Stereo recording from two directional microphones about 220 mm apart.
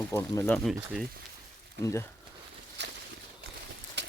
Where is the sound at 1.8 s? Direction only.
15° left (ahead or behind).